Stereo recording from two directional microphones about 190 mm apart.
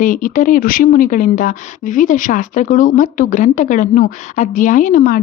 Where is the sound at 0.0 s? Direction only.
45° left (ahead or behind).